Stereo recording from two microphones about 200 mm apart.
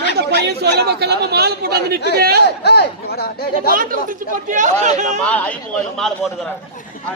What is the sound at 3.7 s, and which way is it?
Speech, 45° right (ahead or behind).